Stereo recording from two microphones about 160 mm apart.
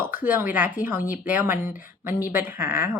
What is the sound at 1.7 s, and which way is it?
Speech, 60° left (ahead or behind).